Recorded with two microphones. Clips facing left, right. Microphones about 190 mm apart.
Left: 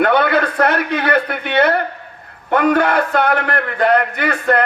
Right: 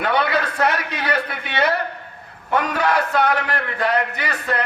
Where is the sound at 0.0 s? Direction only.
55° left (ahead or behind).